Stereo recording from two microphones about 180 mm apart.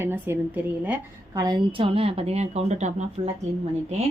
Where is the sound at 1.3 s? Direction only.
25° right (ahead or behind).